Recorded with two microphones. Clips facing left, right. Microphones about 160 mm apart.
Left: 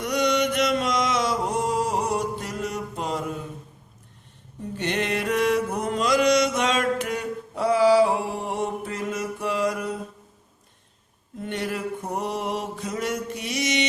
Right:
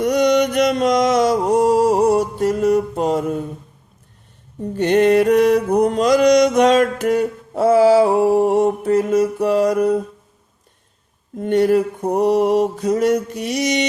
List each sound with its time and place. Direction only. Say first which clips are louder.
0.0 s mantra: right 8 dB; 45° right (ahead or behind)
4.8 s music: right 13 dB; 45° right (ahead or behind)
5.7 s mantra: right 8 dB; 40° right (ahead or behind)
11.3 s mantra: right 14 dB; 45° right (ahead or behind)
13.4 s music: right 7 dB; 45° right (ahead or behind)